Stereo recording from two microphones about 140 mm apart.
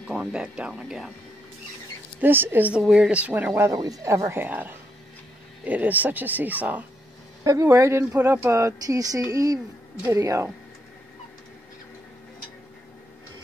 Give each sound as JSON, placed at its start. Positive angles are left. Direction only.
{"t": 0.1, "sound": "speech", "side_deg": -5}
{"t": 2.1, "sound": "speech", "side_deg": -15}
{"t": 3.7, "sound": "speech", "side_deg": -25}